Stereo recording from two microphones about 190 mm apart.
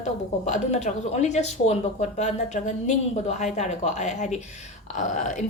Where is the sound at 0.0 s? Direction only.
35° left (ahead or behind).